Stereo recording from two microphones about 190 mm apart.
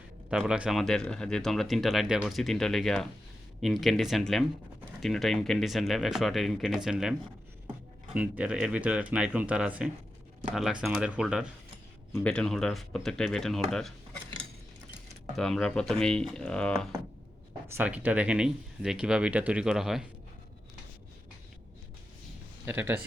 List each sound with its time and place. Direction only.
0.3 s speech: 5° right (ahead or behind)
15.4 s speech: 5° left (ahead or behind)
17.7 s speech: 10° right (ahead or behind)
22.6 s speech: 10° right (ahead or behind)